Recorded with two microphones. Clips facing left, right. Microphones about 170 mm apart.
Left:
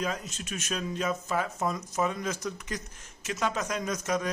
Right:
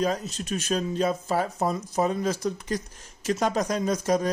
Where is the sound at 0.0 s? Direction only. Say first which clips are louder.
Right 7 dB; 35° right (ahead or behind).